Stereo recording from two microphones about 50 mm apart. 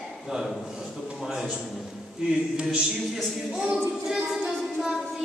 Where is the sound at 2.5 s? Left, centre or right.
Centre.